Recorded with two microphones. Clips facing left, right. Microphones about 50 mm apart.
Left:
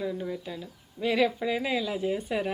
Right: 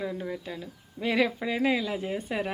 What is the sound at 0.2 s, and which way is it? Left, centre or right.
Speech, right.